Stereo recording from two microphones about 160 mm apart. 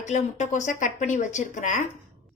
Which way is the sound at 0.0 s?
50° left (ahead or behind).